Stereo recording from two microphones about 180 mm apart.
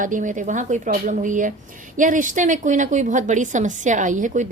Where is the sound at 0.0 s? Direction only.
45° right (ahead or behind).